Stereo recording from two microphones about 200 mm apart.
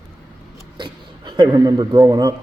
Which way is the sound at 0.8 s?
20° right (ahead or behind).